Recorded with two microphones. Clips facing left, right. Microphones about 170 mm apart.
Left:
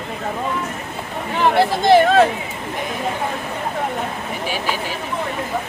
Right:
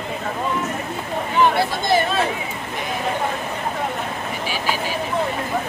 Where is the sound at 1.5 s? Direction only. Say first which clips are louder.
Left 6 dB; 90° left.